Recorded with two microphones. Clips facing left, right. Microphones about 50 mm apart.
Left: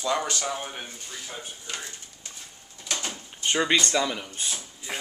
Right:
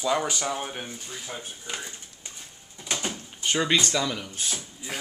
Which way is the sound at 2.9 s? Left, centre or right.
Centre.